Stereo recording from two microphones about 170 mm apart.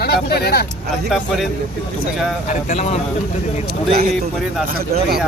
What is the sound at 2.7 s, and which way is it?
Speech, 40° left (ahead or behind).